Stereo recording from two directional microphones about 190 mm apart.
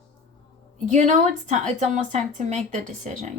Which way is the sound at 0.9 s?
40° right (ahead or behind).